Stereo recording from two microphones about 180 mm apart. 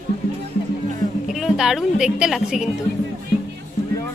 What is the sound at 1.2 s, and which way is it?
A woman's voice, centre (ahead or behind).